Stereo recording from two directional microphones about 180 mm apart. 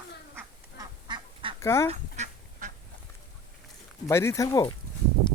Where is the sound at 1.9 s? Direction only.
40° right (ahead or behind).